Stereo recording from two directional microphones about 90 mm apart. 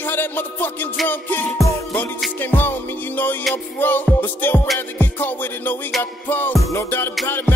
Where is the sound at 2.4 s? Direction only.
25° left (ahead or behind).